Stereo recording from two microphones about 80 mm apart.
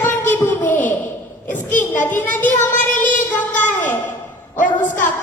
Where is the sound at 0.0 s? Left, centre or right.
Left.